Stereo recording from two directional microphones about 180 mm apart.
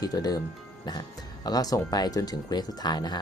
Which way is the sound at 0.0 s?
20° left (ahead or behind).